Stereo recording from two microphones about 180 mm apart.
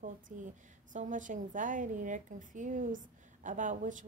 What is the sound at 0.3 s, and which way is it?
Speech, 45° right (ahead or behind).